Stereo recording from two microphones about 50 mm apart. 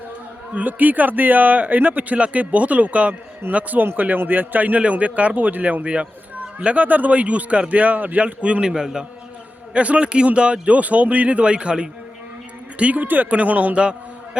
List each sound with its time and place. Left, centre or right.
0.5 s a man's voice: right
5.8 s a man's voice: right
9.7 s a man's voice: right
12.8 s a man's voice: right